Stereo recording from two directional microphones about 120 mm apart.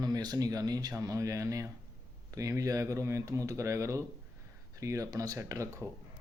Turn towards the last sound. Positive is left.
turn(degrees=-25)  # may be behind; listen again after turning